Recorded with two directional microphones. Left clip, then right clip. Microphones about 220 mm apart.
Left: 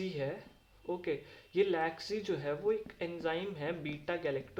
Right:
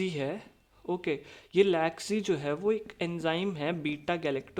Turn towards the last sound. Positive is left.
turn(degrees=-50)  # may be behind; listen again after turning